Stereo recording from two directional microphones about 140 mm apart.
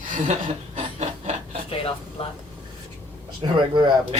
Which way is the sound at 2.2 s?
40° left (ahead or behind).